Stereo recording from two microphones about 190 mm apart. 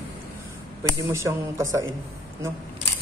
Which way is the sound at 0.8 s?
15° right (ahead or behind).